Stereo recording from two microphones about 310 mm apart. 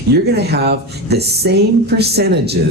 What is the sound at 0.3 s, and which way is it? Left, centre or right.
Speech, right.